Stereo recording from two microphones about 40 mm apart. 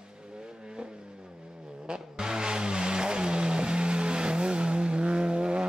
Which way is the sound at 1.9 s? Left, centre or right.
Centre.